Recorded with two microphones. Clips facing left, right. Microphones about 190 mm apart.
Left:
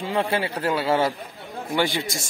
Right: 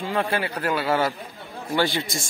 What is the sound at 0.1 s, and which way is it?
A man's voice, 20° left (ahead or behind).